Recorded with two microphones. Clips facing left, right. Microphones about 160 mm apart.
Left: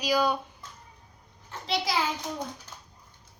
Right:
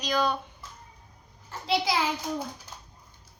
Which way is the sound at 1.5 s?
Centre (ahead or behind).